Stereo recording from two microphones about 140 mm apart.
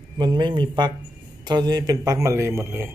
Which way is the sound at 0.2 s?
30° right (ahead or behind).